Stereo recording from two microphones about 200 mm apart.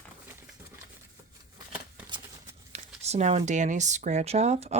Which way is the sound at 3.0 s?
35° right (ahead or behind).